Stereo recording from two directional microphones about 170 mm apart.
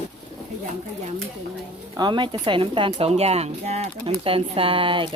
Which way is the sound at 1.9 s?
25° right (ahead or behind).